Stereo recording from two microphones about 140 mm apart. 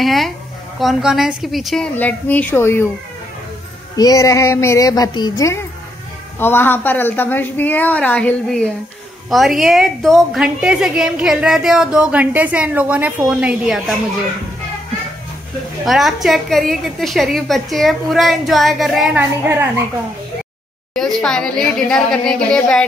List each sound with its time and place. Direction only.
0.0 s a woman's voice: centre (ahead or behind)
2.0 s a woman's voice: 10° left (ahead or behind)
3.9 s a woman's voice: 25° left (ahead or behind); by 13.9 s centre (ahead or behind)
15.8 s a woman's voice: centre (ahead or behind)
19.1 s a woman's voice: 15° right (ahead or behind)
20.9 s a woman's voice: 5° left (ahead or behind)